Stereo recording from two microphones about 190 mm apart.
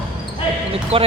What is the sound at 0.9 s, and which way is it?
Speech, 30° right (ahead or behind).